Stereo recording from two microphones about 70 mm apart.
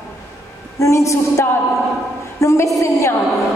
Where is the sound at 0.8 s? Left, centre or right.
Left.